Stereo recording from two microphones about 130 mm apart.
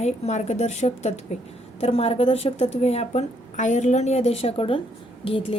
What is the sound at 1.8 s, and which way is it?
A woman's voice, 50° left (ahead or behind).